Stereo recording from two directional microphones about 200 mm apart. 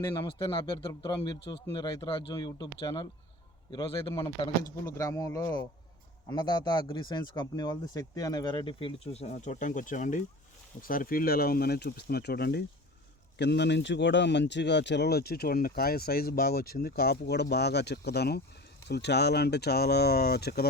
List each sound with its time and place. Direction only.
0.0 s speech: 20° left (ahead or behind); by 20.7 s 50° left (ahead or behind)